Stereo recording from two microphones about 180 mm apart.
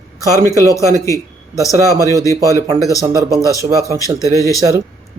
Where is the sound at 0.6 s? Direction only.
15° left (ahead or behind).